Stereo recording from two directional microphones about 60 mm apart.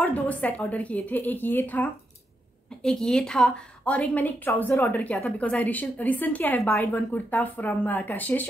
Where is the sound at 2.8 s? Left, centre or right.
Centre.